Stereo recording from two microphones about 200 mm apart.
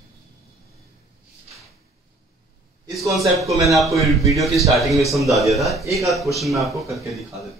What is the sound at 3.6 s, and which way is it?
A man's voice, centre (ahead or behind).